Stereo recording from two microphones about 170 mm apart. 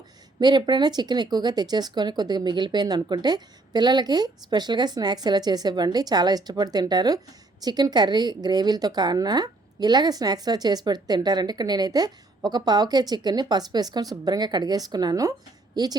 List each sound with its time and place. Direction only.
0.3 s a woman's voice: 25° right (ahead or behind)